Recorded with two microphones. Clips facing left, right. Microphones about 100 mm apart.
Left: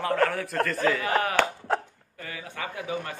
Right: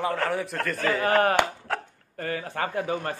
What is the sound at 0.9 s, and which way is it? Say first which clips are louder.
A man's voice: right 3 dB; 40° right (ahead or behind).